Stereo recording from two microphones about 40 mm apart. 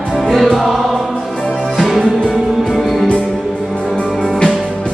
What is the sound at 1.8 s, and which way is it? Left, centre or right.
Music, centre.